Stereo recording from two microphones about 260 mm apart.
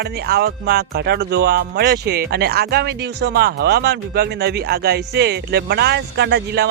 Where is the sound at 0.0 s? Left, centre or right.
Right.